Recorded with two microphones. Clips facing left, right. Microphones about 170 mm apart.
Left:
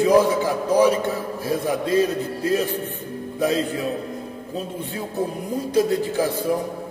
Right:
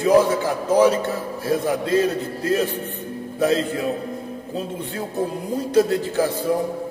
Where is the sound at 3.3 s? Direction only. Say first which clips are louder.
Right 2 dB; 15° left (ahead or behind).